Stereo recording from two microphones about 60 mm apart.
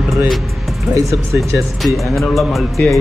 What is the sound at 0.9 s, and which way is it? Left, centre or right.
Speech, right.